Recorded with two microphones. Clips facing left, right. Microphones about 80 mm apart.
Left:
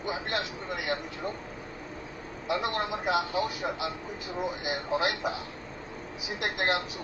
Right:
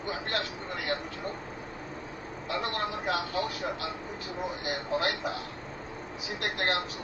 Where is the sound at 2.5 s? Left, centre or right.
Centre.